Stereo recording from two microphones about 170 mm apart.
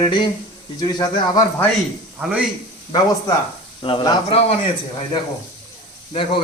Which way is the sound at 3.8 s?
30° left (ahead or behind).